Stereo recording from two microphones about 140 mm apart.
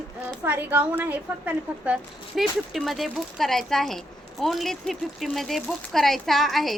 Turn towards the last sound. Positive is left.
turn(degrees=0)  # may be behind; listen again after turning